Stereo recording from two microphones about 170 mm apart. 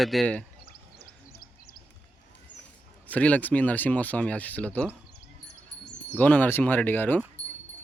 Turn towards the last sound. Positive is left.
turn(degrees=10)  # may be behind; listen again after turning